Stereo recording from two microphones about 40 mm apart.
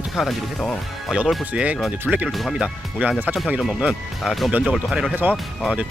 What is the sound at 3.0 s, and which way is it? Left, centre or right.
Speech, right.